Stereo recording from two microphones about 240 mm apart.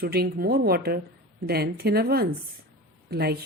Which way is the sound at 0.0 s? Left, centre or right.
Right.